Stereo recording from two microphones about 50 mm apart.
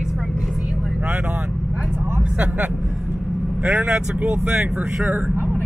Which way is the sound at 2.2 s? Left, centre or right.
Right.